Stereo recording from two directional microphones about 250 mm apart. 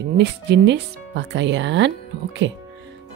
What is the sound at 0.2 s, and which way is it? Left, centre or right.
Speech, right.